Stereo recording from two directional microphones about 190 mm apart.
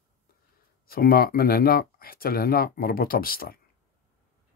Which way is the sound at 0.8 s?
50° left (ahead or behind).